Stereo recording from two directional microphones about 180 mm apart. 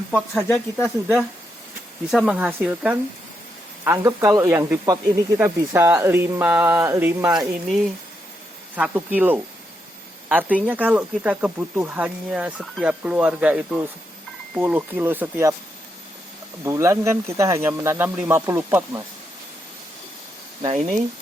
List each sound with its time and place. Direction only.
0.1 s speech: 10° left (ahead or behind)
0.8 s speech: centre (ahead or behind)
8.7 s speech: 10° right (ahead or behind)
16.6 s speech: 15° right (ahead or behind)
20.6 s speech: 20° right (ahead or behind)